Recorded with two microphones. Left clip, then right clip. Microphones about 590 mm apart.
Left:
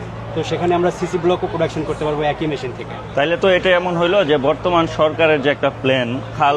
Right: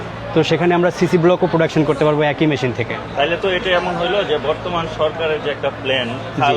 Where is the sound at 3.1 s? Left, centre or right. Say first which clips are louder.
Left 3 dB; left.